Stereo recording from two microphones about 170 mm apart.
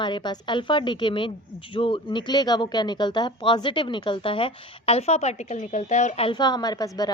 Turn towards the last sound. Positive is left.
turn(degrees=20)  # may be behind; listen again after turning